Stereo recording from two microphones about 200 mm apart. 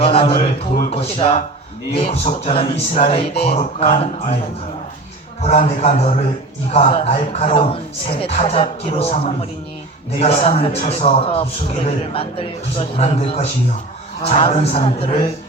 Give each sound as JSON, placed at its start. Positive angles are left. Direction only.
{"t": 0.0, "sound": "speech", "side_deg": 25}
{"t": 5.4, "sound": "speech", "side_deg": 30}